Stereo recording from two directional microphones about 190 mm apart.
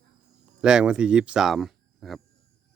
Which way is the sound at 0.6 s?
5° right (ahead or behind).